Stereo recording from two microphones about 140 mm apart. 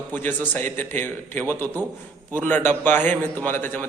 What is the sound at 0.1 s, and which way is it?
A man's voice, 15° left (ahead or behind).